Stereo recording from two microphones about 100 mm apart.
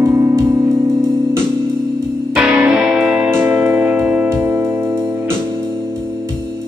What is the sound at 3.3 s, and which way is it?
Music, 20° right (ahead or behind).